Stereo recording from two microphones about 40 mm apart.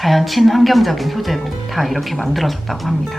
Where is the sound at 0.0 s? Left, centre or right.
Centre.